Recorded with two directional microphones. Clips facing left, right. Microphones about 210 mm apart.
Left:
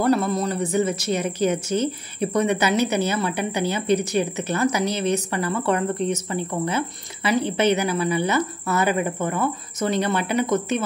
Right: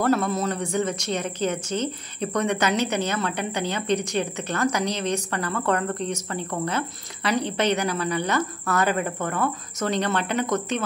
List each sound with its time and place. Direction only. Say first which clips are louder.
0.0 s a woman's voice: left 2 dB; centre (ahead or behind)